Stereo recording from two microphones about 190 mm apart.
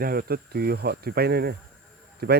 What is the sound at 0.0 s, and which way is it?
Speech, 55° right (ahead or behind).